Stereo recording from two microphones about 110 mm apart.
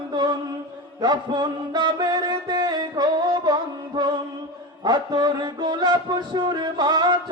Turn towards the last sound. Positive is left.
turn(degrees=-40)  # may be behind; listen again after turning